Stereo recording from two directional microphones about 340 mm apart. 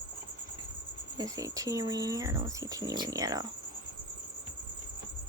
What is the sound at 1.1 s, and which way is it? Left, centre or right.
Speech, centre.